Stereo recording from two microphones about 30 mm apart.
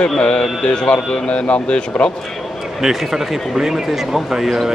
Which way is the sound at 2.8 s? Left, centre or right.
Centre.